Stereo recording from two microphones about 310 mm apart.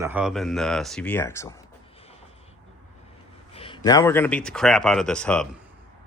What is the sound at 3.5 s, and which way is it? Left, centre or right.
Speech, centre.